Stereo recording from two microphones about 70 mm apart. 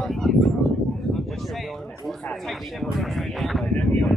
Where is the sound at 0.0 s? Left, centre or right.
Centre.